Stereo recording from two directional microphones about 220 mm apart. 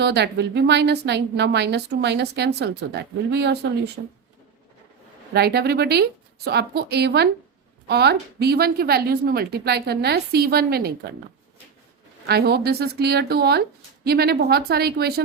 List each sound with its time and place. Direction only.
0.0 s a woman's voice: 50° right (ahead or behind)
5.3 s a woman's voice: 45° right (ahead or behind)
12.2 s a woman's voice: 45° right (ahead or behind)